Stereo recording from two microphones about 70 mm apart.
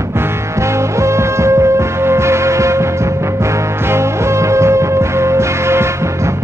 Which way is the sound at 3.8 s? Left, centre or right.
Right.